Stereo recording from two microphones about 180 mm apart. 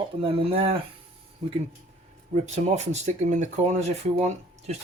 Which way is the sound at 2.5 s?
40° right (ahead or behind).